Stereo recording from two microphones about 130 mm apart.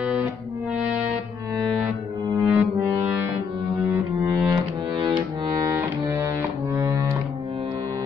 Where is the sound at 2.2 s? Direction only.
30° right (ahead or behind).